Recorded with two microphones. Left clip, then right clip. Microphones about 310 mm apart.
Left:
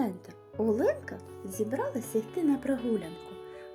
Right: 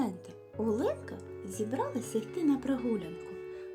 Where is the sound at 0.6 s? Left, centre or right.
Centre.